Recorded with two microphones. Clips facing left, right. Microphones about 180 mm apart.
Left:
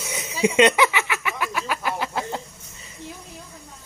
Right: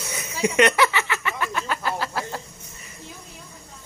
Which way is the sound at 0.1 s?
15° left (ahead or behind).